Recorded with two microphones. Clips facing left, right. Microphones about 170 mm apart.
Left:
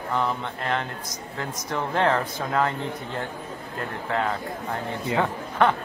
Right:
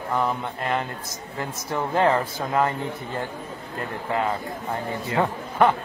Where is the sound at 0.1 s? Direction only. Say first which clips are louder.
Right 1 dB; 5° right (ahead or behind).